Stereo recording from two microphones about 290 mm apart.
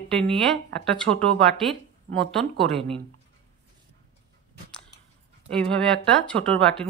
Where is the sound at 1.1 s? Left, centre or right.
Right.